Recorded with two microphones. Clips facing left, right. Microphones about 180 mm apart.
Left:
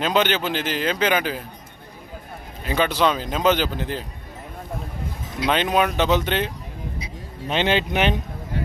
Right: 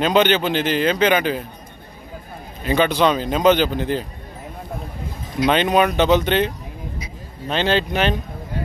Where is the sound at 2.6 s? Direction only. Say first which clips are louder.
Right 3 dB; 5° left (ahead or behind).